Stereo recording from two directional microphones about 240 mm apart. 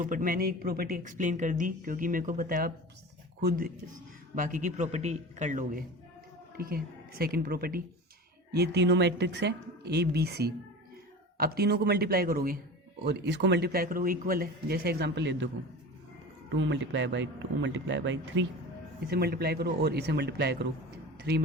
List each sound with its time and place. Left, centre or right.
0.0 s speech: right
16.6 s speech: right